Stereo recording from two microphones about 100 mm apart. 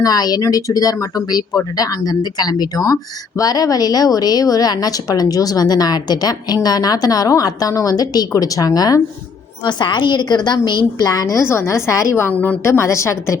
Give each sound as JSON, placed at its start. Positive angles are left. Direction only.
{"t": 0.0, "sound": "speech", "side_deg": 40}
{"t": 9.6, "sound": "speech", "side_deg": 50}